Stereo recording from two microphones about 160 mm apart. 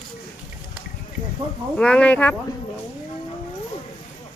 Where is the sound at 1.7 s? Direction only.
5° left (ahead or behind).